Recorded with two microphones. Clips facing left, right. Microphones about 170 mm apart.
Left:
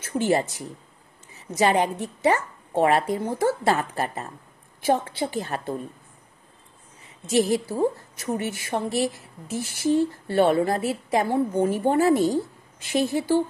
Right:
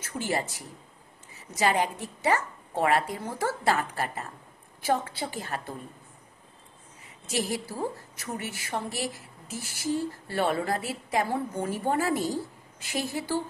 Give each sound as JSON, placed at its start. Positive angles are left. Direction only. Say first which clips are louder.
{"t": 0.2, "sound": "speech", "louder": "left 8 dB", "side_deg": 25}
{"t": 7.2, "sound": "speech", "louder": "left 9 dB", "side_deg": 25}